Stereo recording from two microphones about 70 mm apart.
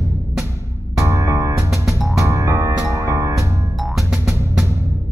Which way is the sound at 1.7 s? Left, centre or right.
Centre.